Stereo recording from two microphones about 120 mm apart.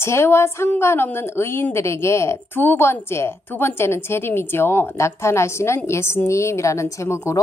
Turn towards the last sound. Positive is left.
turn(degrees=25)  # may be behind; listen again after turning